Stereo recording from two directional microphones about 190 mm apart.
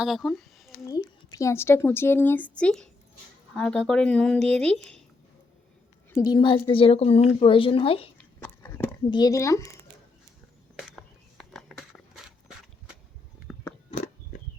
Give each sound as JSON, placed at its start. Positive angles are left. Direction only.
{"t": 0.0, "sound": "speech", "side_deg": 0}
{"t": 0.7, "sound": "a woman's voice", "side_deg": 20}
{"t": 6.1, "sound": "a woman's voice", "side_deg": 20}
{"t": 8.2, "sound": "a sound", "side_deg": 10}
{"t": 9.0, "sound": "a woman's voice", "side_deg": 20}
{"t": 10.8, "sound": "a sound", "side_deg": 0}
{"t": 13.5, "sound": "chewing", "side_deg": 0}